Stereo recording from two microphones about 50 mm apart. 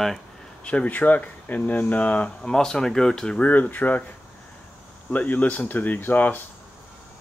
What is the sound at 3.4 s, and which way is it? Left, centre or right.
Speech, left.